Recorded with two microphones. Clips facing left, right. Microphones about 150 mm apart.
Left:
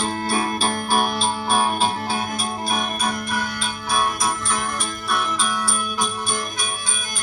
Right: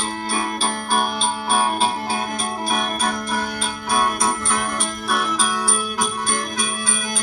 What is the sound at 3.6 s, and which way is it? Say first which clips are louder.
Music: right 2 dB; 55° right (ahead or behind).